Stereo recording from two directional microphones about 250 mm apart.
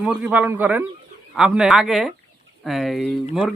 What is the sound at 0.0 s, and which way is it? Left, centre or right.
A man's voice, centre.